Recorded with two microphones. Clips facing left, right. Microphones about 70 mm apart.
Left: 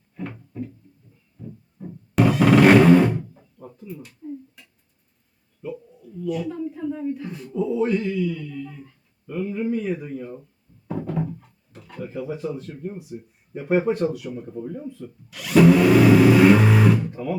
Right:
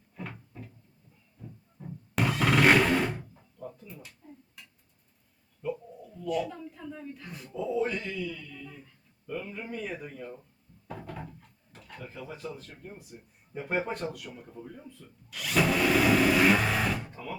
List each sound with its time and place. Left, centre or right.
0.2 s cupboard open or close: centre
1.4 s vehicle: centre
3.3 s a sound: centre
5.6 s roaring cats: centre
6.2 s speech: centre